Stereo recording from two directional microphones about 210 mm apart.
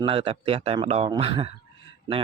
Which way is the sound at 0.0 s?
25° right (ahead or behind).